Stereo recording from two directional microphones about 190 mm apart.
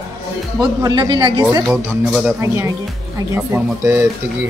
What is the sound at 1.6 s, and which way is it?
A woman's voice, 5° right (ahead or behind).